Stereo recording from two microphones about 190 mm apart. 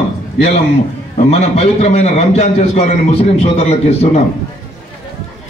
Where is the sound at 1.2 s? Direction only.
35° left (ahead or behind).